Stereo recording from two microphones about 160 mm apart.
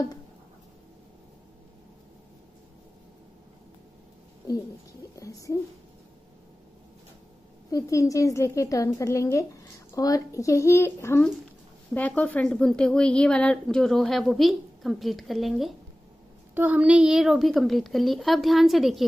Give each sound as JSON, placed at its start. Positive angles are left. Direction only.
{"t": 5.1, "sound": "speech", "side_deg": 20}
{"t": 7.7, "sound": "a woman's voice", "side_deg": 20}